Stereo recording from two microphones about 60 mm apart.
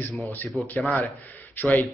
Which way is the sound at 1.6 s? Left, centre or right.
Centre.